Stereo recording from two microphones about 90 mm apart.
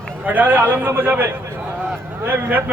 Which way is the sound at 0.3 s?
20° right (ahead or behind).